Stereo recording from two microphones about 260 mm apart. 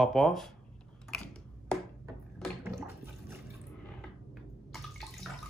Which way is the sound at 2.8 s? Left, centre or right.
Centre.